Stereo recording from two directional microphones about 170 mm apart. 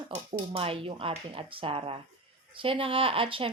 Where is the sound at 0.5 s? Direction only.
35° right (ahead or behind).